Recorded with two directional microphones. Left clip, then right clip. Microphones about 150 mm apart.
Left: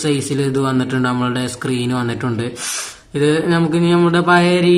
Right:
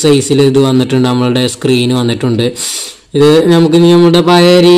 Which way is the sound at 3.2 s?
30° right (ahead or behind).